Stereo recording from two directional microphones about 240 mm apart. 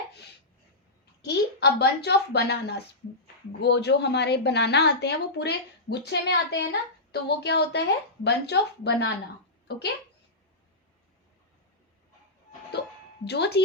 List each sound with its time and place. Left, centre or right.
1.2 s a woman's voice: left
13.2 s a woman's voice: left